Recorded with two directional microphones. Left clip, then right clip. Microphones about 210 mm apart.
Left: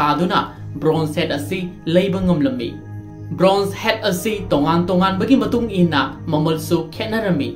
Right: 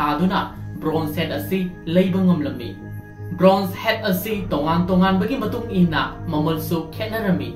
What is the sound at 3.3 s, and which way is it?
Speech, 45° left (ahead or behind).